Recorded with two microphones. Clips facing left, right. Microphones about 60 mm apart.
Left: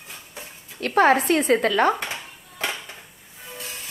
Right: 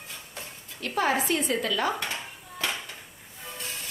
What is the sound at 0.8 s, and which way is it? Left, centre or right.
Speech, left.